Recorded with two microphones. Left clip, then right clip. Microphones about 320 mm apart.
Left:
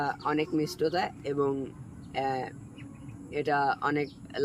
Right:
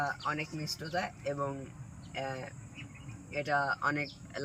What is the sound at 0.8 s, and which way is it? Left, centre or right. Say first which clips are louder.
Speech: left 4 dB; centre.